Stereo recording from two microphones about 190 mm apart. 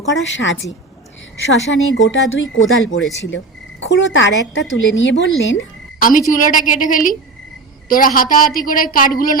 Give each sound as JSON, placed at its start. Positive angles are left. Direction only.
{"t": 0.3, "sound": "a woman's voice", "side_deg": 75}
{"t": 1.7, "sound": "speech", "side_deg": 80}
{"t": 3.2, "sound": "a woman's voice", "side_deg": 75}
{"t": 6.0, "sound": "a woman's voice", "side_deg": 45}